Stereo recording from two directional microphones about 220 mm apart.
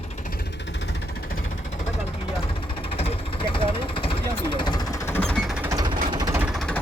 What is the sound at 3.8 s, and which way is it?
Jackhammer, 25° left (ahead or behind).